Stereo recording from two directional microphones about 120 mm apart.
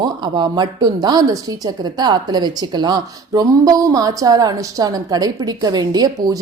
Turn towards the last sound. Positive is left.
turn(degrees=-35)  # may be behind; listen again after turning